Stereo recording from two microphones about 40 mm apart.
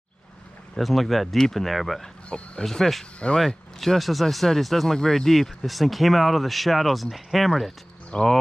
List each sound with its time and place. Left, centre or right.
0.7 s speech: centre
2.2 s speech: left
2.6 s speech: centre
8.1 s speech: left